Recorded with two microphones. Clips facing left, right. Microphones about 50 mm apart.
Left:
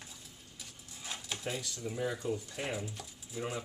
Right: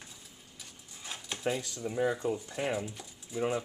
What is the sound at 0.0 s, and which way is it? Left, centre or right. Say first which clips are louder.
Dog: even; centre.